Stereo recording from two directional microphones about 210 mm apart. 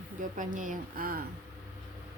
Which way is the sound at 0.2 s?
40° right (ahead or behind).